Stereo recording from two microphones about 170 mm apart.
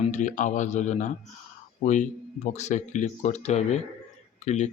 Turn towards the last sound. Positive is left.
turn(degrees=40)  # may be behind; listen again after turning